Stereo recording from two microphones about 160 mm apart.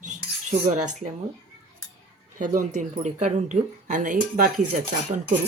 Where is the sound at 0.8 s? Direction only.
50° right (ahead or behind).